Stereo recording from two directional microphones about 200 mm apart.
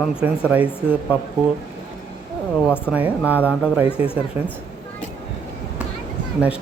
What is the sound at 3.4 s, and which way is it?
Speech, 5° right (ahead or behind).